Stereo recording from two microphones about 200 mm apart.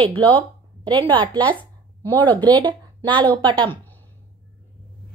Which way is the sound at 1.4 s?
10° left (ahead or behind).